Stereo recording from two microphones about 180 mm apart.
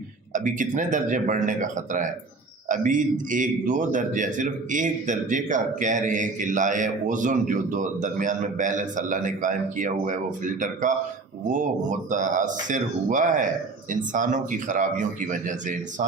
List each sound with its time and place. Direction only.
0.3 s a man's voice: 45° right (ahead or behind)